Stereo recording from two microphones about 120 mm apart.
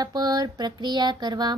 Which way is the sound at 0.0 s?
35° right (ahead or behind).